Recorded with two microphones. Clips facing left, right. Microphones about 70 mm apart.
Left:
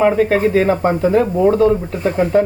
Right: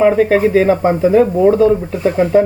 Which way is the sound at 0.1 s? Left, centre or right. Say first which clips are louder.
Right 3 dB; centre.